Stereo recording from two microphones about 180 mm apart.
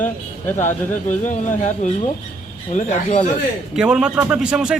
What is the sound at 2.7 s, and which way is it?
Speech, 40° left (ahead or behind).